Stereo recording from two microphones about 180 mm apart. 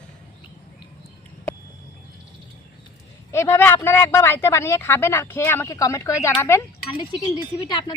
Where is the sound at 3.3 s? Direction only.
15° left (ahead or behind).